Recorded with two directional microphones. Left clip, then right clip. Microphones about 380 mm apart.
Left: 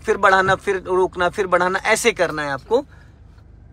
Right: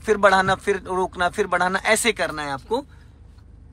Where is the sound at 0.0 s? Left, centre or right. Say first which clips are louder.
Left 2 dB; centre.